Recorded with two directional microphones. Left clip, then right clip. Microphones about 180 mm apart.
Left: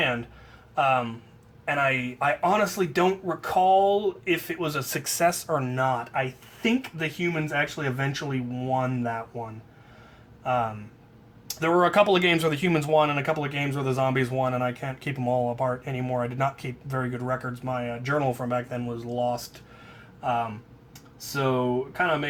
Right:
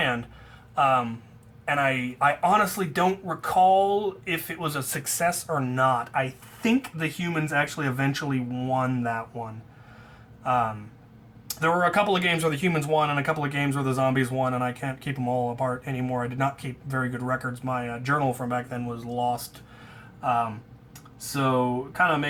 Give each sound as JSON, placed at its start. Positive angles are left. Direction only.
{"t": 0.8, "sound": "speech", "side_deg": 25}
{"t": 10.4, "sound": "speech", "side_deg": 20}
{"t": 21.3, "sound": "speech", "side_deg": 20}